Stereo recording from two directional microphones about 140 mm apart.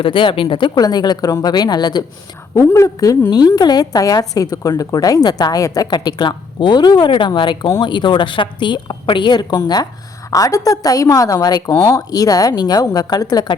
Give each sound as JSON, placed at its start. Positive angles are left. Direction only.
{"t": 0.0, "sound": "speech", "side_deg": 35}
{"t": 2.6, "sound": "a woman's voice", "side_deg": 20}